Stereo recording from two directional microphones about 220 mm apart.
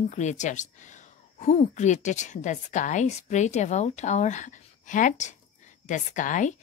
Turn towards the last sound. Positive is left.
turn(degrees=35)  # may be behind; listen again after turning